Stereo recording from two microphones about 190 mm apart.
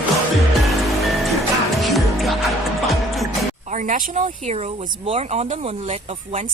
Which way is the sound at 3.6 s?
40° right (ahead or behind).